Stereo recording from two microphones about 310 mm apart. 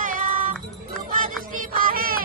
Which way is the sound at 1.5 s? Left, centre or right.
Right.